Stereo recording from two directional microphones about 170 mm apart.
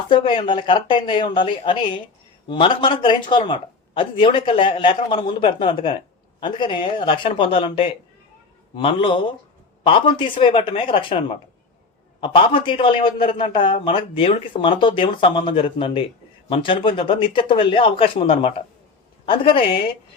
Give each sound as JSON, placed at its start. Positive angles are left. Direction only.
{"t": 0.1, "sound": "a man's voice", "side_deg": 30}
{"t": 12.2, "sound": "a man's voice", "side_deg": 30}